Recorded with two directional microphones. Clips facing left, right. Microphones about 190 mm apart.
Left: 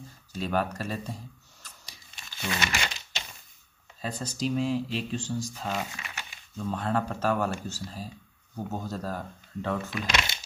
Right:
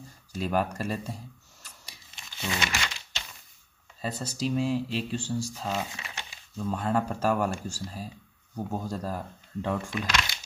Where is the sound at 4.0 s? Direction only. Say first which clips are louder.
Even; 5° right (ahead or behind).